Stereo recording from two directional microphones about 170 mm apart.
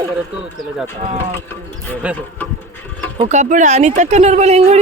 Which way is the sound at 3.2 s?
45° right (ahead or behind).